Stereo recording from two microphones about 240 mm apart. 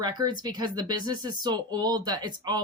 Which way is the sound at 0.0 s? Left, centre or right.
Centre.